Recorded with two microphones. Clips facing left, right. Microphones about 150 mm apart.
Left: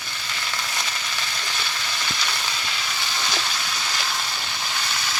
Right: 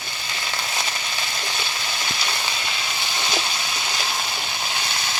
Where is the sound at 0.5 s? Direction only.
25° right (ahead or behind).